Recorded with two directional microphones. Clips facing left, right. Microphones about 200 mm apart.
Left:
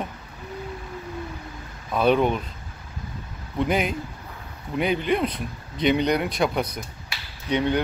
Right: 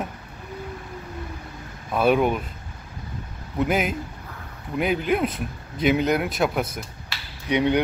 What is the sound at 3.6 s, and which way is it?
Speech, 5° right (ahead or behind).